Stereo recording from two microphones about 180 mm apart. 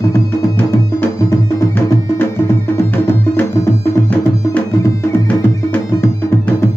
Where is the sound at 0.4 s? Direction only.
15° left (ahead or behind).